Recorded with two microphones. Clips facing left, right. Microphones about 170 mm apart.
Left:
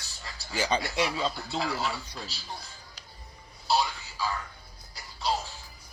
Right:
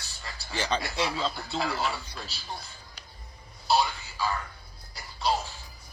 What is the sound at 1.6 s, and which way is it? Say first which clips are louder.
Speech: right 2 dB; 60° right (ahead or behind).